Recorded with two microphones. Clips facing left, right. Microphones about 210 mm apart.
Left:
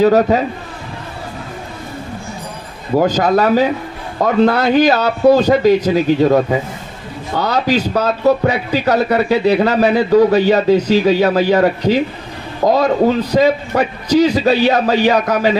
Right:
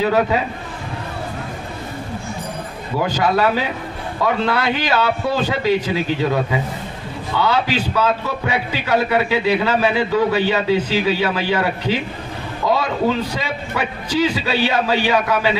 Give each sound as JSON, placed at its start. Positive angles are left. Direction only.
{"t": 0.0, "sound": "a man's voice", "side_deg": 40}
{"t": 3.0, "sound": "a man's voice", "side_deg": 45}